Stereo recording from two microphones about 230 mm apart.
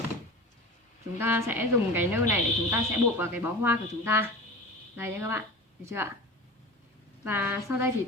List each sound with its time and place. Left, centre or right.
1.2 s a woman's voice: centre
7.3 s a woman's voice: centre